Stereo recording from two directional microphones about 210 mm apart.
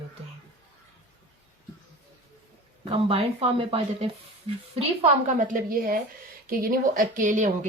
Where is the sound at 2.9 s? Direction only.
25° right (ahead or behind).